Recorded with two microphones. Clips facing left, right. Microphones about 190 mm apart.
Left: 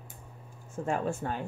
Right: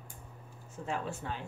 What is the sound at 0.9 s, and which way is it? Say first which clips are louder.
Speech: left 6 dB; 50° left (ahead or behind).